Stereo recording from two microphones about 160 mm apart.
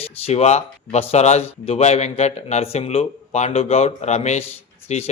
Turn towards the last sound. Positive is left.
turn(degrees=45)  # may be behind; listen again after turning